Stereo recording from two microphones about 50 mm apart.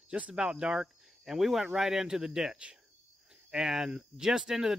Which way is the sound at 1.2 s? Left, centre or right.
Centre.